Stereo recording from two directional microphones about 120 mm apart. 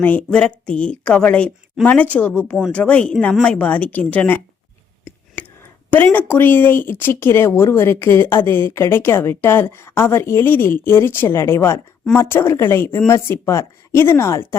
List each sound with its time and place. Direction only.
0.0 s speech: 10° left (ahead or behind)
5.4 s a sound: 15° left (ahead or behind)
5.9 s speech: 15° left (ahead or behind)